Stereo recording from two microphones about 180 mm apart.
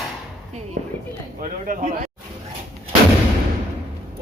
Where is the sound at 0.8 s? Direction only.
65° right (ahead or behind).